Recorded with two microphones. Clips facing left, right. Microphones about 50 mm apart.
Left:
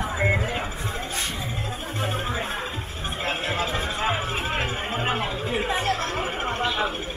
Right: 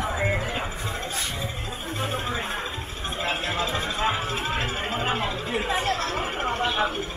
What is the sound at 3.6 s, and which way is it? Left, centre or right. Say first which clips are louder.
Music: even; centre.